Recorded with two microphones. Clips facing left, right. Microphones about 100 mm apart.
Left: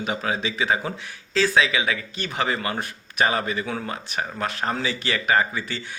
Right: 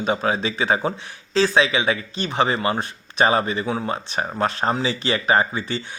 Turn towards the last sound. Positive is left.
turn(degrees=-30)  # may be behind; listen again after turning